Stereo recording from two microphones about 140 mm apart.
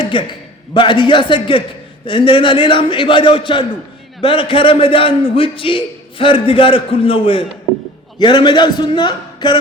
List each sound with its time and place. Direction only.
0.0 s a man's voice: 35° left (ahead or behind)